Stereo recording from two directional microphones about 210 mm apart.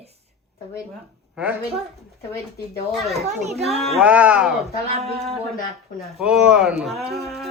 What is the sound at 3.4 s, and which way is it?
Speech, 30° right (ahead or behind).